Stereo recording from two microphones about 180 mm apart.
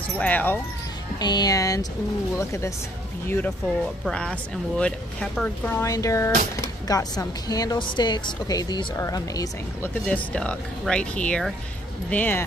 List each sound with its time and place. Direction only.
0.2 s speech: 10° left (ahead or behind)
1.2 s speech: 20° left (ahead or behind); by 5.9 s 5° left (ahead or behind)
5.9 s speech: 20° left (ahead or behind)
10.0 s speech: 5° left (ahead or behind)